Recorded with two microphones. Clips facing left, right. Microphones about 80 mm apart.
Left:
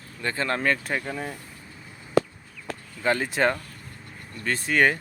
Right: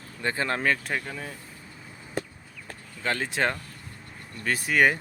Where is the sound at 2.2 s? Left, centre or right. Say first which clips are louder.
Left 11 dB; left.